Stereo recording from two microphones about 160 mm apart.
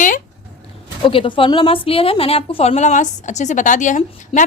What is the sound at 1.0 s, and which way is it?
A woman's voice, 35° left (ahead or behind).